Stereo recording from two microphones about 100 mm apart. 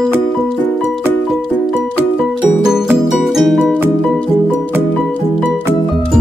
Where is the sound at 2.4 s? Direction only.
15° right (ahead or behind).